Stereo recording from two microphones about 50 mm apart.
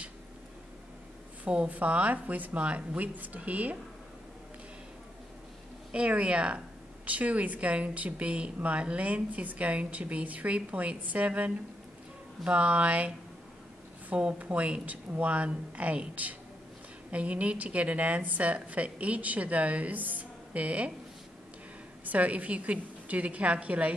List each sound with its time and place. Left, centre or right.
1.4 s a woman's voice: right
5.9 s a woman's voice: right
22.0 s a woman's voice: right